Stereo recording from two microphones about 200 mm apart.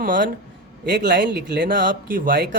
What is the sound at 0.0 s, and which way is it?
Speech, 40° right (ahead or behind).